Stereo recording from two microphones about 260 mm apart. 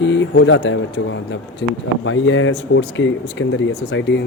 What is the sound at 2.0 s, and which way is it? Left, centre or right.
Speech, left.